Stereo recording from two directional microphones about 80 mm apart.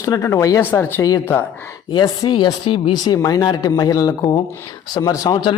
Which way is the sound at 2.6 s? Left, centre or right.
Left.